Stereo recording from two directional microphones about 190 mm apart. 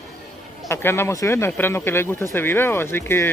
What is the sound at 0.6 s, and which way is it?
Speech, 15° left (ahead or behind).